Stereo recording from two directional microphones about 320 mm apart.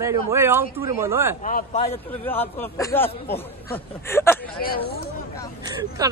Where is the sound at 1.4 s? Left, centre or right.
Left.